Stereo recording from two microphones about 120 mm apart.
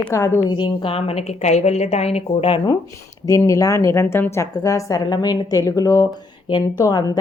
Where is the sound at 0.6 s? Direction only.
50° left (ahead or behind).